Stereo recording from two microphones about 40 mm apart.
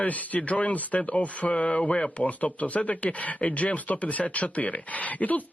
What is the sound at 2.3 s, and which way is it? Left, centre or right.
Speech, left.